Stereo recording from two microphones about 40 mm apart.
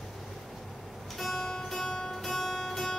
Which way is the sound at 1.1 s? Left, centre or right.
Centre.